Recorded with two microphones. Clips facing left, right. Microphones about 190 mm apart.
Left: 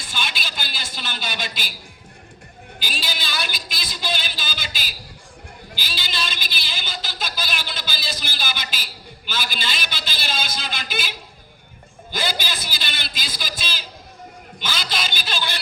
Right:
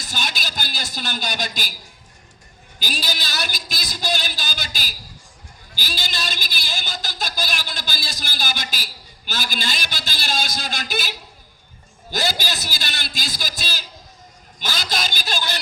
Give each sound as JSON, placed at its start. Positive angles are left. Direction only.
{"t": 0.0, "sound": "a woman's voice", "side_deg": -45}
{"t": 2.8, "sound": "a woman's voice", "side_deg": -45}
{"t": 12.1, "sound": "a woman's voice", "side_deg": -45}